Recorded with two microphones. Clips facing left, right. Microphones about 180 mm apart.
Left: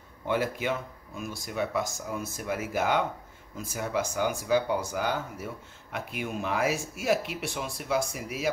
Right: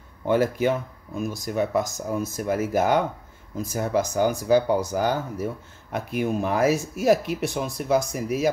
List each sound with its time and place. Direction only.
0.3 s speech: 40° right (ahead or behind)